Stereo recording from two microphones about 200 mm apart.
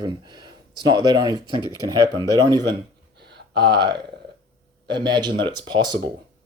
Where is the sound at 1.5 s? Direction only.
20° left (ahead or behind).